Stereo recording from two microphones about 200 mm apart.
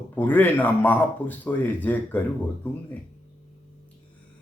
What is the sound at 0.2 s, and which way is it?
Speech, 10° left (ahead or behind).